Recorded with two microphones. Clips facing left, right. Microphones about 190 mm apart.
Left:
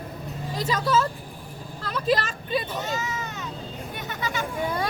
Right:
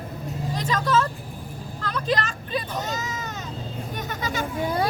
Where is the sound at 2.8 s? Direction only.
40° right (ahead or behind).